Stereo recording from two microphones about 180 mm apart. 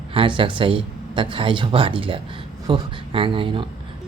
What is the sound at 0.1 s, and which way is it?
Speech, 30° right (ahead or behind).